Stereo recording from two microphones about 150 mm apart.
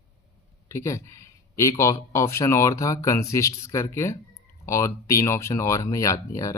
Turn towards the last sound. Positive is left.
turn(degrees=20)  # may be behind; listen again after turning